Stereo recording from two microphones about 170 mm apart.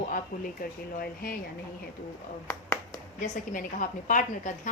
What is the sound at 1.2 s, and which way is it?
Speech, 60° left (ahead or behind).